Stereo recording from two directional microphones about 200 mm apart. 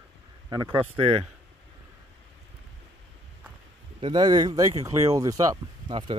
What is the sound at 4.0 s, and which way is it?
Speech, 20° right (ahead or behind).